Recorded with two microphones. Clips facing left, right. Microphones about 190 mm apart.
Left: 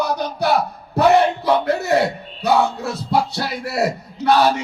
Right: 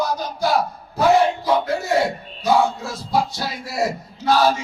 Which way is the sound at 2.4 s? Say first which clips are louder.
Left 1 dB; 65° left (ahead or behind).